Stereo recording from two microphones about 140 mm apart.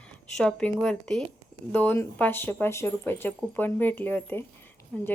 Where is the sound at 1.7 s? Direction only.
15° left (ahead or behind).